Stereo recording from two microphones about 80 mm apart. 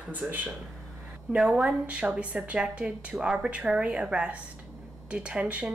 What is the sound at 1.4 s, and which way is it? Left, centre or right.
A woman's voice, centre.